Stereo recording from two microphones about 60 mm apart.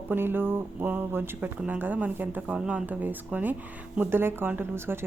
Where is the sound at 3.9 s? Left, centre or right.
Right.